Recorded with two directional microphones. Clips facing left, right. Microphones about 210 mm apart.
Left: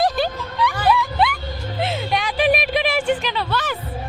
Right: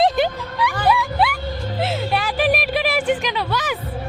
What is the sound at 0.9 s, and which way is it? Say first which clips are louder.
Vehicle: even; 5° right (ahead or behind).